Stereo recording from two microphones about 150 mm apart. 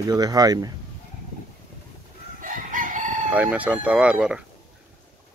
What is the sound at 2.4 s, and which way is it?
Chicken, 60° right (ahead or behind).